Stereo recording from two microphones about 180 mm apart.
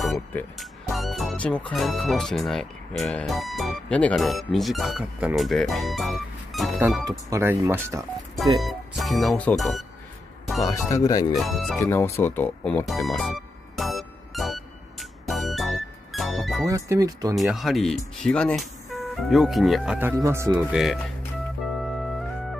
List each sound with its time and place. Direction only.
0.0 s speech: 5° left (ahead or behind)
7.1 s speech: 15° right (ahead or behind)
8.4 s speech: centre (ahead or behind)
10.6 s speech: 15° left (ahead or behind)
11.3 s speech: centre (ahead or behind)
11.8 s speech: 15° left (ahead or behind)
12.8 s music: centre (ahead or behind)
16.6 s speech: 20° right (ahead or behind)
17.4 s speech: centre (ahead or behind); by 20.5 s 15° right (ahead or behind)
20.5 s speech: centre (ahead or behind)